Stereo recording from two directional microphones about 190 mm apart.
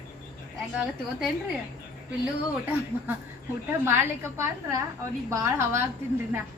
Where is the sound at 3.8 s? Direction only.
10° right (ahead or behind).